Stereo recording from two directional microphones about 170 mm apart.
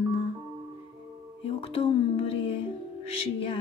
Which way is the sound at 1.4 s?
35° left (ahead or behind).